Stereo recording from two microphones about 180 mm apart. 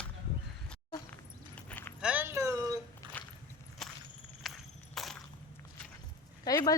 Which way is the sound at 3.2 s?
10° left (ahead or behind).